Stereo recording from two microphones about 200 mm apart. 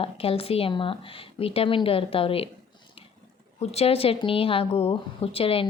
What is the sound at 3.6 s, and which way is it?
Speech, 30° left (ahead or behind).